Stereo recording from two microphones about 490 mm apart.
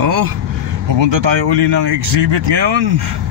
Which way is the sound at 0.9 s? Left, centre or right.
Right.